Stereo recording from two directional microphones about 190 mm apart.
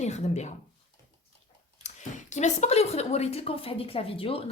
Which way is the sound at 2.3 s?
40° left (ahead or behind).